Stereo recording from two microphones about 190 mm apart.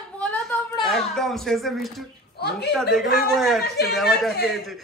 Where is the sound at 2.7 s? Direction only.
Centre (ahead or behind).